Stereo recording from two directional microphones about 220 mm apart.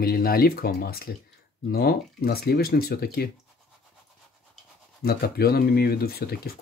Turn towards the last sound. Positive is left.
turn(degrees=45)  # may be behind; listen again after turning